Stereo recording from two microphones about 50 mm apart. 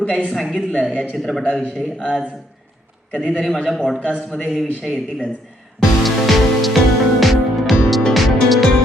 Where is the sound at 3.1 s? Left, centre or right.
Left.